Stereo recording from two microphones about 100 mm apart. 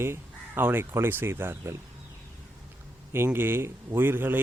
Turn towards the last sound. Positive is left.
turn(degrees=-20)  # may be behind; listen again after turning